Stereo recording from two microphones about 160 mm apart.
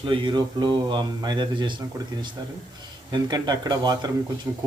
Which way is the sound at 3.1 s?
25° right (ahead or behind).